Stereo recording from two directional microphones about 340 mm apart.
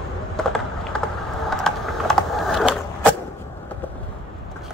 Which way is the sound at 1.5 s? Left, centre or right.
Centre.